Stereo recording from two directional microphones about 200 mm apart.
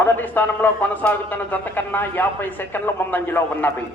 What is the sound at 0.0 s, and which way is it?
A man's voice, 10° left (ahead or behind).